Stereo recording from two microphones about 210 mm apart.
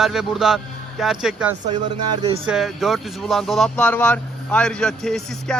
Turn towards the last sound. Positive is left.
turn(degrees=0)  # may be behind; listen again after turning